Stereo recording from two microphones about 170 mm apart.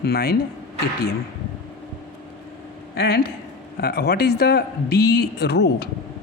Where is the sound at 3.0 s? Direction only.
70° left (ahead or behind).